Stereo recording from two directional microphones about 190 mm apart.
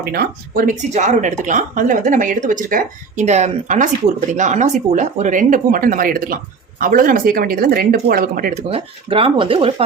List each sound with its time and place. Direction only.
0.0 s speech: 50° right (ahead or behind)
8.7 s speech: 30° right (ahead or behind)